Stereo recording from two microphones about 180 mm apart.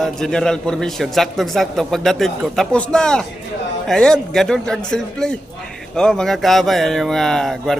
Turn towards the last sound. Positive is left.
turn(degrees=0)  # may be behind; listen again after turning